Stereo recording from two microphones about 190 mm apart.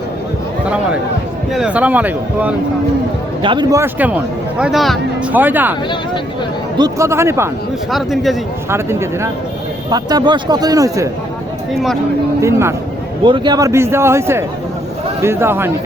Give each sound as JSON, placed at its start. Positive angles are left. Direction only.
{"t": 1.5, "sound": "a man's voice", "side_deg": -5}
{"t": 3.4, "sound": "a man's voice", "side_deg": -25}
{"t": 6.7, "sound": "a man's voice", "side_deg": -20}
{"t": 7.9, "sound": "speech", "side_deg": 0}
{"t": 8.7, "sound": "a man's voice", "side_deg": -15}
{"t": 12.4, "sound": "a man's voice", "side_deg": -15}
{"t": 13.2, "sound": "a man's voice", "side_deg": -25}